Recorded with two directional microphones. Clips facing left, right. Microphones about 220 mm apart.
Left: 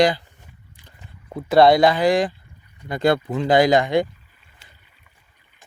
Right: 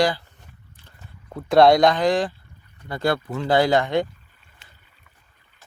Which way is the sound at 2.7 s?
15° left (ahead or behind).